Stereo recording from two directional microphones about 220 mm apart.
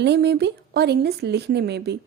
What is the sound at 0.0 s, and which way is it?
Speech, 50° right (ahead or behind).